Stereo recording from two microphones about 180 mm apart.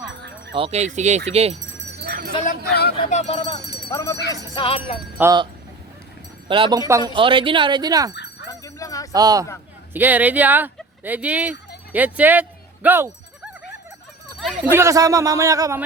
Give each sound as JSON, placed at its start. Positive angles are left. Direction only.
{"t": 0.5, "sound": "speech", "side_deg": -35}
{"t": 2.0, "sound": "a sound", "side_deg": -55}
{"t": 3.1, "sound": "speech", "side_deg": 35}
{"t": 3.8, "sound": "music", "side_deg": 20}
{"t": 5.2, "sound": "a man's voice", "side_deg": -10}
{"t": 6.5, "sound": "speech", "side_deg": -25}
{"t": 7.1, "sound": "speech", "side_deg": -30}
{"t": 8.1, "sound": "jingle bell", "side_deg": 70}
{"t": 8.4, "sound": "jingle bell", "side_deg": 20}
{"t": 9.1, "sound": "speech", "side_deg": -20}
{"t": 9.9, "sound": "speech", "side_deg": -10}
{"t": 11.9, "sound": "a sound", "side_deg": -10}
{"t": 14.3, "sound": "a sound", "side_deg": 0}
{"t": 14.7, "sound": "a man's voice", "side_deg": -15}